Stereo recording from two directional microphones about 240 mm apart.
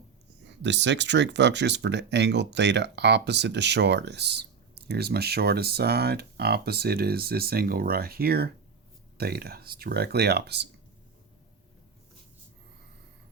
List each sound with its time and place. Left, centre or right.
0.4 s speech: right